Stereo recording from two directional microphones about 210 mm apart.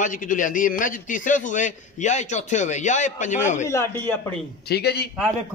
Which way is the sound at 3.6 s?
10° left (ahead or behind).